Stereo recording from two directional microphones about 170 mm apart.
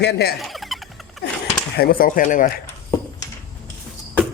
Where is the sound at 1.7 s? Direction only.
60° left (ahead or behind).